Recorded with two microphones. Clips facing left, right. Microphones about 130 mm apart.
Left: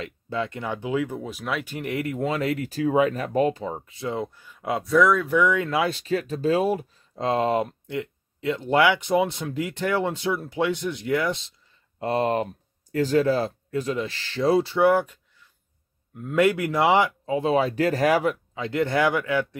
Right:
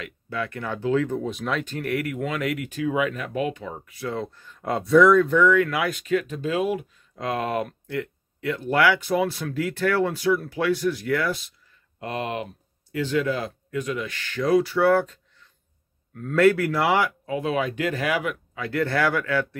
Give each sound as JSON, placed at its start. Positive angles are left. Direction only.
{"t": 0.0, "sound": "speech", "side_deg": 25}
{"t": 12.0, "sound": "speech", "side_deg": 35}
{"t": 14.9, "sound": "speech", "side_deg": 15}
{"t": 16.2, "sound": "speech", "side_deg": 15}
{"t": 18.5, "sound": "speech", "side_deg": 20}